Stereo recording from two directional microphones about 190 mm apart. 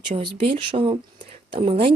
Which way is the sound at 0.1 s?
30° right (ahead or behind).